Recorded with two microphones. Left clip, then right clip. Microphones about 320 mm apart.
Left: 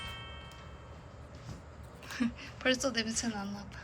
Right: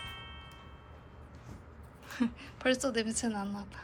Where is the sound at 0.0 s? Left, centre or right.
Centre.